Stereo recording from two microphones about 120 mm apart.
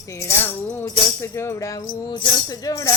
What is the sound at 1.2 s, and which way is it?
Music, 25° left (ahead or behind).